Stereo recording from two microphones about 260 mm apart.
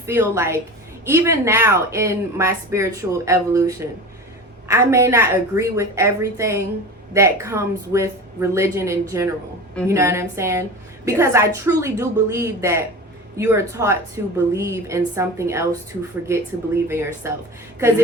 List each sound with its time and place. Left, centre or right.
0.0 s a woman's voice: centre